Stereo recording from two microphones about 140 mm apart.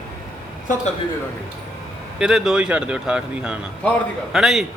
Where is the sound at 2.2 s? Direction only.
5° right (ahead or behind).